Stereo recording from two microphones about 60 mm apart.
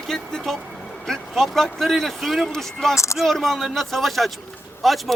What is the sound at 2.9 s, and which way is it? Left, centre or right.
Speech, left.